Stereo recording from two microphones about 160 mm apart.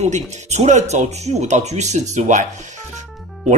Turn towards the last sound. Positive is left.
turn(degrees=0)  # may be behind; listen again after turning